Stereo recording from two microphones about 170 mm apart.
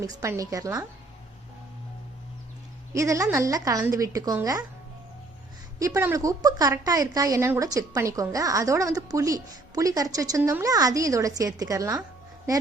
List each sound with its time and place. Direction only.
0.0 s a woman's voice: 20° right (ahead or behind)
2.9 s a woman's voice: 20° right (ahead or behind)
5.8 s a woman's voice: 15° right (ahead or behind)